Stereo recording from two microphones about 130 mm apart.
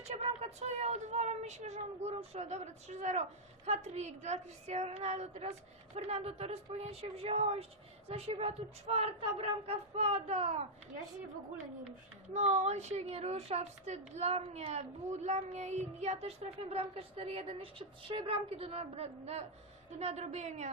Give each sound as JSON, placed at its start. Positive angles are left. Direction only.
{"t": 0.0, "sound": "a sound", "side_deg": -55}
{"t": 2.1, "sound": "a woman's voice", "side_deg": -55}
{"t": 12.3, "sound": "a woman's voice", "side_deg": -60}